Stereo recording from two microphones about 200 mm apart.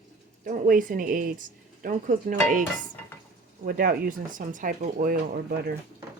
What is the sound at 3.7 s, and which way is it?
Speech, 45° right (ahead or behind).